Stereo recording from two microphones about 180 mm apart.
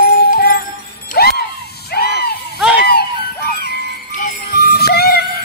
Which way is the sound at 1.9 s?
65° left (ahead or behind).